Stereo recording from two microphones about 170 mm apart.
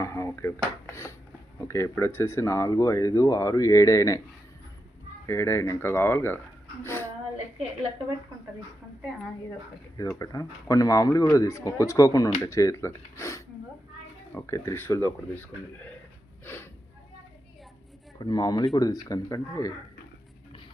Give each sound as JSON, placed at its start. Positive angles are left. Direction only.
{"t": 0.0, "sound": "speech", "side_deg": 15}
{"t": 5.2, "sound": "speech", "side_deg": 15}
{"t": 6.8, "sound": "a sound", "side_deg": 15}
{"t": 10.0, "sound": "speech", "side_deg": 20}
{"t": 18.2, "sound": "speech", "side_deg": 25}